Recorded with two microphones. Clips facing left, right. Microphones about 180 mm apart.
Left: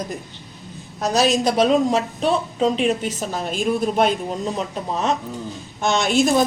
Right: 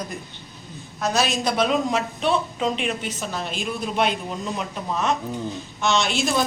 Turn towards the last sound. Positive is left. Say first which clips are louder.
# left 5 dB
turn(degrees=45)  # may be behind; listen again after turning